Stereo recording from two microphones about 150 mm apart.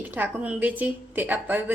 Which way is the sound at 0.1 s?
10° right (ahead or behind).